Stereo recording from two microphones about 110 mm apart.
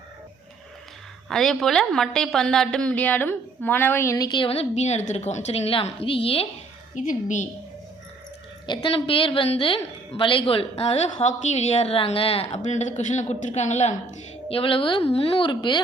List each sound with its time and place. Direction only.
1.3 s a woman's voice: centre (ahead or behind); by 4.3 s 25° left (ahead or behind)
4.3 s speech: 45° left (ahead or behind)
4.7 s a woman's voice: 90° left
5.8 s a woman's voice: 60° left (ahead or behind)
8.6 s a woman's voice: 45° left (ahead or behind)
8.9 s a woman's voice: 55° left (ahead or behind); by 13.9 s 90° left
14.5 s a woman's voice: 55° left (ahead or behind)